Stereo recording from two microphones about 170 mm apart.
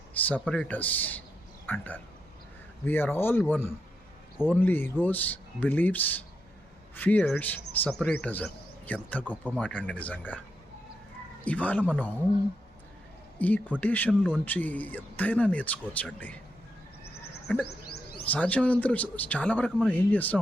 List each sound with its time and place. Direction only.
0.1 s speech: 10° left (ahead or behind)
11.4 s speech: 10° left (ahead or behind)
13.4 s speech: 10° left (ahead or behind)
17.7 s bird: 70° left (ahead or behind)
18.3 s speech: 10° left (ahead or behind)